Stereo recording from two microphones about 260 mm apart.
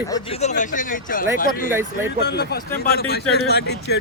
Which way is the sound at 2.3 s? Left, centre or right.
Left.